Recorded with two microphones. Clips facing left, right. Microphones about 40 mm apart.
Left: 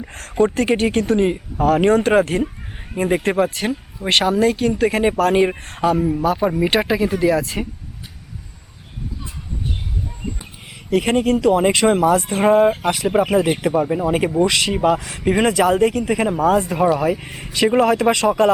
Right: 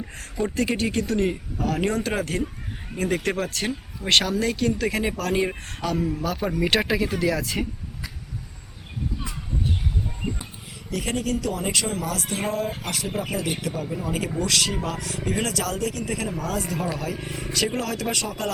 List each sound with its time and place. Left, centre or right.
0.2 s speech: left
1.6 s speech: left
3.0 s speech: left; by 7.7 s centre
10.8 s speech: left
12.0 s speech: left
14.3 s speech: left